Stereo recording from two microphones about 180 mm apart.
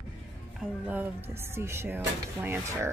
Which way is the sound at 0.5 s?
10° right (ahead or behind).